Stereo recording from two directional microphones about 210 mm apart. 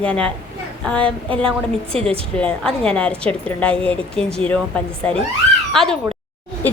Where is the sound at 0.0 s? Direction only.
5° left (ahead or behind).